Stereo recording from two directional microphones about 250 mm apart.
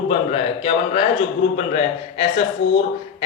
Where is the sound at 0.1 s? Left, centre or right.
Left.